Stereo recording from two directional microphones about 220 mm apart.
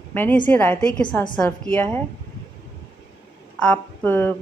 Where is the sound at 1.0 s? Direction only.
20° left (ahead or behind).